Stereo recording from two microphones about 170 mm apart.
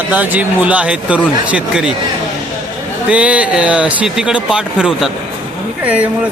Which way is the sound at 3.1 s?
10° right (ahead or behind).